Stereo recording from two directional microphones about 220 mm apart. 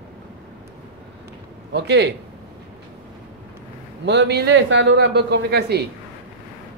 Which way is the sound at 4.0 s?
50° right (ahead or behind).